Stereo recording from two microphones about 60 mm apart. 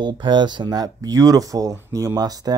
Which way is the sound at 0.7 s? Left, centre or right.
Right.